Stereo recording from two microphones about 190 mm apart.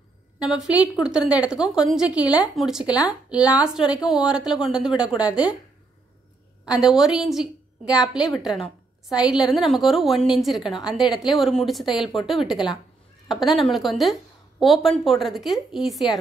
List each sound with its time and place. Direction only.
0.4 s a woman's voice: 5° right (ahead or behind)
6.6 s a woman's voice: 5° right (ahead or behind)